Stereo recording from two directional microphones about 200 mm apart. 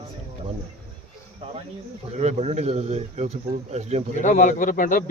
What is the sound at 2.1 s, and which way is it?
Speech, 35° right (ahead or behind).